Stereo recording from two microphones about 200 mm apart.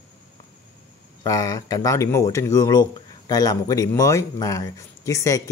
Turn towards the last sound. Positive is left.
turn(degrees=15)  # may be behind; listen again after turning